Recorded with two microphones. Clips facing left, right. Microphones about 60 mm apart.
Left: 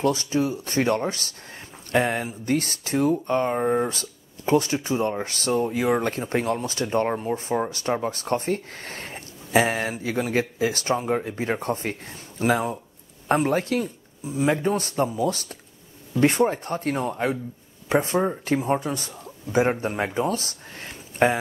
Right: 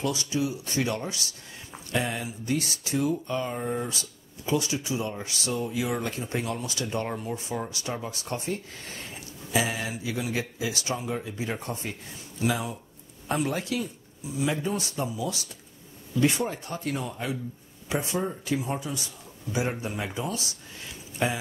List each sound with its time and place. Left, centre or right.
0.0 s speech: left